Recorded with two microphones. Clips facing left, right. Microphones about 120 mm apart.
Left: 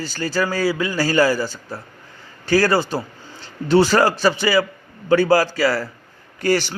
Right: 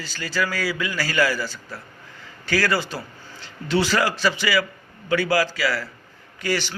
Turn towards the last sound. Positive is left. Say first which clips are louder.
# left 6 dB
turn(degrees=45)  # may be behind; listen again after turning